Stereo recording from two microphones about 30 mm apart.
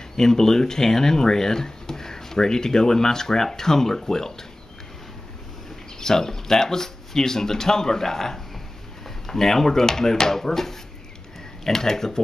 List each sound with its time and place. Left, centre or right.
0.2 s speech: centre
5.9 s speech: centre